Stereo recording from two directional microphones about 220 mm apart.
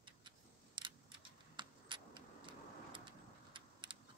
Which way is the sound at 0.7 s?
20° right (ahead or behind).